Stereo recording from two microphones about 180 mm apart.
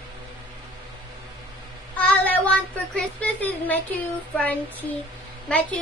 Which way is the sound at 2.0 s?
10° left (ahead or behind).